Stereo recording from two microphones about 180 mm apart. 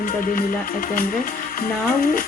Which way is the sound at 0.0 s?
50° left (ahead or behind).